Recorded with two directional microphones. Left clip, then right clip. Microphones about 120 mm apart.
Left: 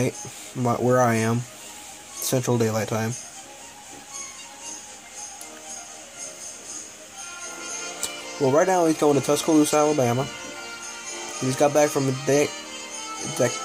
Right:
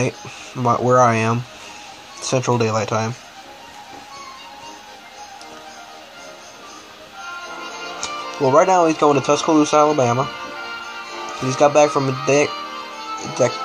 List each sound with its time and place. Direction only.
0.6 s speech: 15° left (ahead or behind)
7.2 s music: 35° left (ahead or behind)
8.4 s speech: 25° left (ahead or behind)
10.2 s music: 35° left (ahead or behind)
11.4 s speech: 20° left (ahead or behind)
12.0 s speech: 35° left (ahead or behind)
12.4 s music: 35° left (ahead or behind)